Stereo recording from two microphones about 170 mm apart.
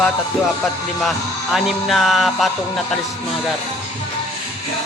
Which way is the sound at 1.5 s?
Centre (ahead or behind).